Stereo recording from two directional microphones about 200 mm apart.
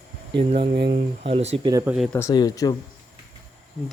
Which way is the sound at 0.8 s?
25° right (ahead or behind).